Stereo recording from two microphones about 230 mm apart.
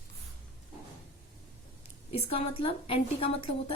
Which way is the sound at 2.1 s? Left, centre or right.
Left.